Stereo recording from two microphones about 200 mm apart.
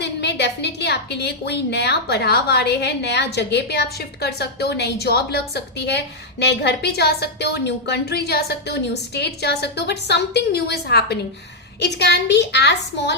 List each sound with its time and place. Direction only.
0.0 s a woman's voice: 55° left (ahead or behind)